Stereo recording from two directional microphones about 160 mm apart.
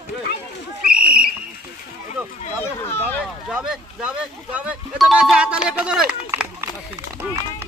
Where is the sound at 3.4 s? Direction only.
5° right (ahead or behind).